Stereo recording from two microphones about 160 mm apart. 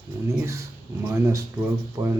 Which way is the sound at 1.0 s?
20° right (ahead or behind).